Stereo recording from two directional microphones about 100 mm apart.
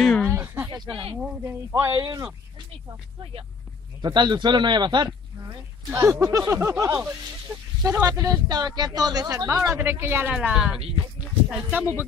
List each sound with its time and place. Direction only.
0.0 s a sound: 10° left (ahead or behind)
0.3 s a sound: 25° right (ahead or behind)
1.4 s speech: 25° right (ahead or behind)
4.0 s speech: 50° right (ahead or behind)
5.9 s speech: 25° right (ahead or behind)
7.8 s speech: 35° right (ahead or behind)
10.4 s speech: 10° right (ahead or behind)